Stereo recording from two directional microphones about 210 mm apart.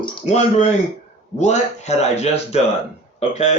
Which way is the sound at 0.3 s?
35° left (ahead or behind).